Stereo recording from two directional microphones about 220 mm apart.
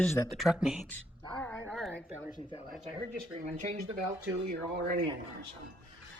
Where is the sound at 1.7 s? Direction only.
5° left (ahead or behind).